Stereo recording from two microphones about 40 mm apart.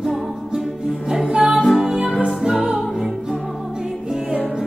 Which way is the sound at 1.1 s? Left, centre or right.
Centre.